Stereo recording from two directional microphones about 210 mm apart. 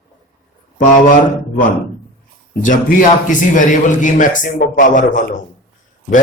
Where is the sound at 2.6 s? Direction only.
40° left (ahead or behind).